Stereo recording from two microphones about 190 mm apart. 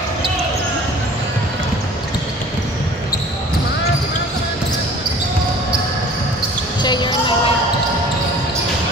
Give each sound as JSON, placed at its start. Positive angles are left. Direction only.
{"t": 6.8, "sound": "basketball bounce", "side_deg": 25}